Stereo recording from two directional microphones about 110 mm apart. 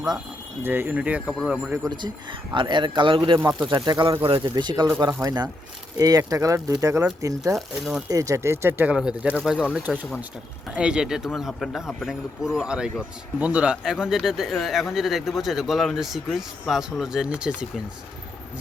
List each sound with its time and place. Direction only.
0.6 s speech: 20° right (ahead or behind)
1.3 s speech: 5° left (ahead or behind)
1.9 s speech: 45° right (ahead or behind)
3.7 s speech: 35° right (ahead or behind)
4.3 s speech: 55° right (ahead or behind)
4.5 s speech: 40° right (ahead or behind)
7.5 s speech: centre (ahead or behind)
8.1 s speech: 30° right (ahead or behind)
8.9 s speech: 10° right (ahead or behind)